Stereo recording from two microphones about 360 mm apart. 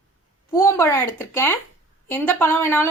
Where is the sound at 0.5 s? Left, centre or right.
Centre.